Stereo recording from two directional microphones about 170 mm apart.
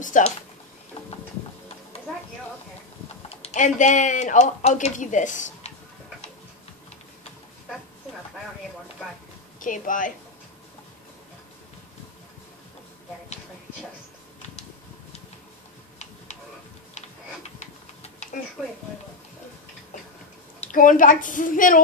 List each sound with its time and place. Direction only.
0.0 s speech: 50° left (ahead or behind)
3.3 s speech: 40° left (ahead or behind)
9.6 s speech: 50° left (ahead or behind)
17.6 s tick-tock: 40° left (ahead or behind)
20.6 s speech: 50° left (ahead or behind)